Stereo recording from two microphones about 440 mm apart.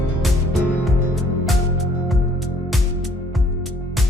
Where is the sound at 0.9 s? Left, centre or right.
Centre.